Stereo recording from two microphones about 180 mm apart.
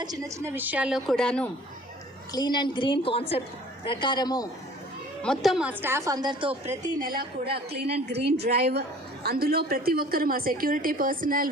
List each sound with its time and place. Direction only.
0.0 s a woman's voice: 20° right (ahead or behind); by 1.5 s 5° left (ahead or behind)
2.3 s a woman's voice: 25° left (ahead or behind)
5.2 s a woman's voice: centre (ahead or behind); by 6.9 s 30° right (ahead or behind)
7.0 s a woman's voice: 55° right (ahead or behind)
7.4 s a woman's voice: 30° right (ahead or behind)
7.9 s a woman's voice: 65° right (ahead or behind)